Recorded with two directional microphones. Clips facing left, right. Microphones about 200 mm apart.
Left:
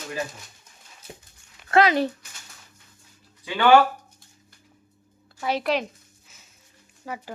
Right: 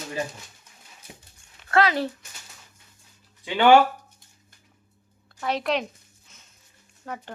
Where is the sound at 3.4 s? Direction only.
20° right (ahead or behind).